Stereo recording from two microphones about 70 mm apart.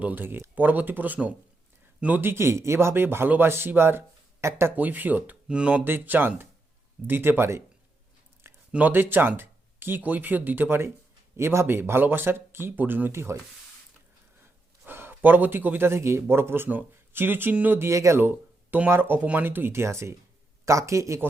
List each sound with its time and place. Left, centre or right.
0.0 s speech: right
2.2 s speech: right
4.8 s speech: right
5.8 s speech: right
8.7 s speech: right
14.8 s a man's voice: right
17.7 s speech: right
18.2 s a sound: right
18.9 s speech: right